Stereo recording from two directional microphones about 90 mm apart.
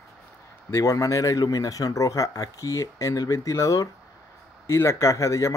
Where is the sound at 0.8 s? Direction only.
35° left (ahead or behind).